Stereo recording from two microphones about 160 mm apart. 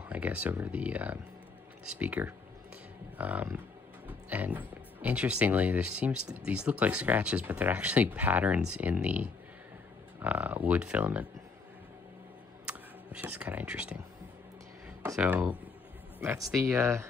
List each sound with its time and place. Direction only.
0.1 s speech: 10° right (ahead or behind)
12.6 s a sound: 5° right (ahead or behind)
15.1 s speech: 10° right (ahead or behind)